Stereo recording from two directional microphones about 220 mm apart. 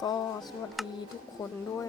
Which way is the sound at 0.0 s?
20° left (ahead or behind).